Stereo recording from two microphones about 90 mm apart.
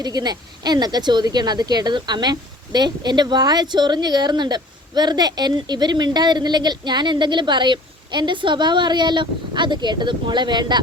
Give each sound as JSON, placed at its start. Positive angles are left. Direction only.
{"t": 0.0, "sound": "speech", "side_deg": -50}